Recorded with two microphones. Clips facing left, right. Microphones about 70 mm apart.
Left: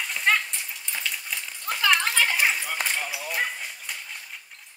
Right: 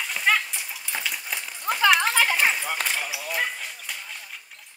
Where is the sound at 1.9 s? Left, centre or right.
Centre.